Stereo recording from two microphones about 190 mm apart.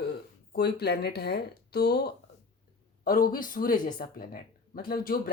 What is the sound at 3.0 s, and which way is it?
Speech, 45° left (ahead or behind).